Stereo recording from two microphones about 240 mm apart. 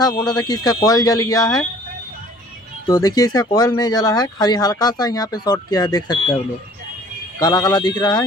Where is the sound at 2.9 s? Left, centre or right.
Centre.